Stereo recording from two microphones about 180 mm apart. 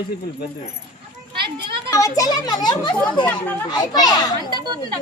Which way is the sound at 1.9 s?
20° left (ahead or behind).